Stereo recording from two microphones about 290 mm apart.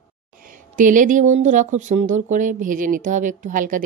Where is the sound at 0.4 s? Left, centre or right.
Right.